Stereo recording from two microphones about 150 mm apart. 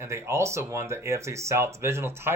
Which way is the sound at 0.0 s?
15° right (ahead or behind).